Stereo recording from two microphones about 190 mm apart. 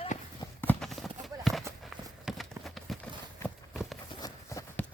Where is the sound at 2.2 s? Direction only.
Centre (ahead or behind).